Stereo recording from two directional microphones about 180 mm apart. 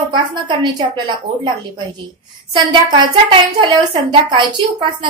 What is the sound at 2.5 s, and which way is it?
A woman's voice, 25° right (ahead or behind).